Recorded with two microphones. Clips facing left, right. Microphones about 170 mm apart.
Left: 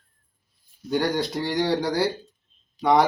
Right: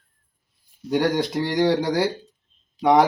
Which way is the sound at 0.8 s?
10° right (ahead or behind).